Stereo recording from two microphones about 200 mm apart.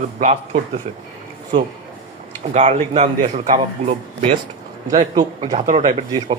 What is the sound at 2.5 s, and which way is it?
A man's voice, 30° right (ahead or behind).